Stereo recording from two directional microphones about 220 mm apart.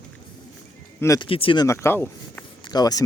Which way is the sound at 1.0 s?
15° left (ahead or behind).